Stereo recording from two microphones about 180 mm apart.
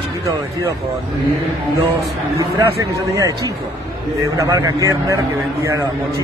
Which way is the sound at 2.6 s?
15° right (ahead or behind).